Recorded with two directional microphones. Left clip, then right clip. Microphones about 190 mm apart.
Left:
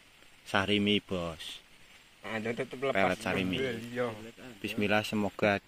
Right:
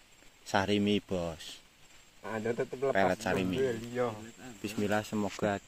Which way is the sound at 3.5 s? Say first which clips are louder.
Right 2 dB; 40° right (ahead or behind).